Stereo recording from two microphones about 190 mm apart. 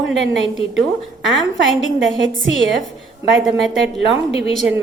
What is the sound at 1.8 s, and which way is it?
A woman's voice, 85° right.